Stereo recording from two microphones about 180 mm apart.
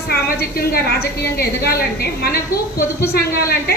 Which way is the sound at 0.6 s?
60° left (ahead or behind).